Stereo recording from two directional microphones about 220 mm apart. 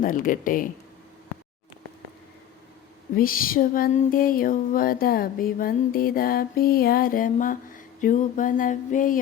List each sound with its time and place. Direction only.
0.0 s music: 40° left (ahead or behind)
3.2 s music: 40° left (ahead or behind)